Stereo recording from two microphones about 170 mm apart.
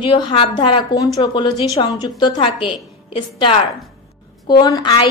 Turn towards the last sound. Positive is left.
turn(degrees=25)  # may be behind; listen again after turning